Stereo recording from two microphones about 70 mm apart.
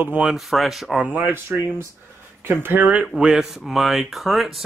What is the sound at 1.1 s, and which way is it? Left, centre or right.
Speech, right.